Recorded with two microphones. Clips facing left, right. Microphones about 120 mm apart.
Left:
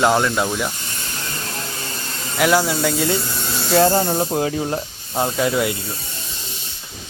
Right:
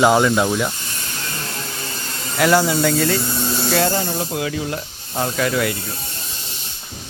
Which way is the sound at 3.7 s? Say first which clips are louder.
Left 6 dB; 35° left (ahead or behind).